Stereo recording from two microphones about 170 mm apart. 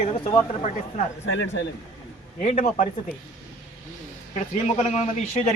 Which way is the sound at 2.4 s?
40° left (ahead or behind).